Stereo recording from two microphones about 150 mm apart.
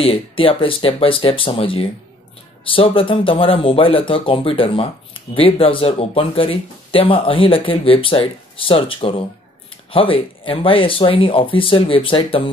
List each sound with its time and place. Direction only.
0.0 s speech: 35° left (ahead or behind)